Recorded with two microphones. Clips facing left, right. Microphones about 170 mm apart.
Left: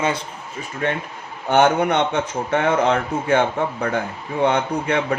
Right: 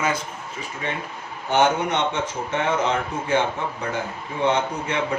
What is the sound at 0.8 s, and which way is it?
Speech, 55° left (ahead or behind).